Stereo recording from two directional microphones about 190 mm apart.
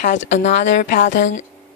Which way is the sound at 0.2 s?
70° left (ahead or behind).